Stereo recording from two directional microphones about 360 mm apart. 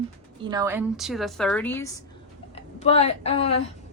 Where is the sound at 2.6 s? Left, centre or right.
Centre.